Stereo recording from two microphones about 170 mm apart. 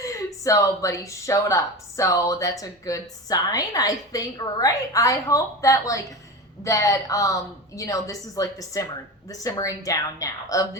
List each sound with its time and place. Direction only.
0.4 s speech: 20° left (ahead or behind)